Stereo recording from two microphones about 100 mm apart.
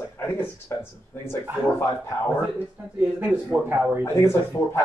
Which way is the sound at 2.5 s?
15° right (ahead or behind).